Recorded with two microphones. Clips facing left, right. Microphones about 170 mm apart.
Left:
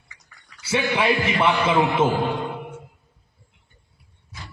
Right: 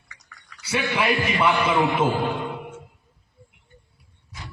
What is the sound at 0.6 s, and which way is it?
A man's voice, 25° left (ahead or behind).